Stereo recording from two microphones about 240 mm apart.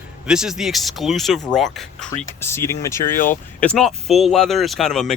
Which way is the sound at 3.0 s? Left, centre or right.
Left.